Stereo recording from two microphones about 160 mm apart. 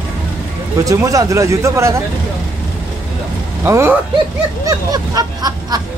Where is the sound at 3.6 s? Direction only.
15° right (ahead or behind).